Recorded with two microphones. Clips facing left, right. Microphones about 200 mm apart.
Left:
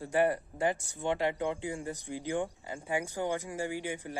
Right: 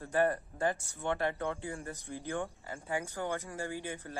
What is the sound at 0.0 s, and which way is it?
Speech, 15° left (ahead or behind).